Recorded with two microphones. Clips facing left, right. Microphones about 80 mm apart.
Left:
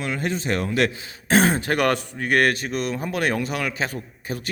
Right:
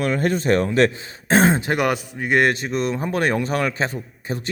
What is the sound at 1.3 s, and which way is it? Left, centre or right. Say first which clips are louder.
A man's voice: right 2 dB; right.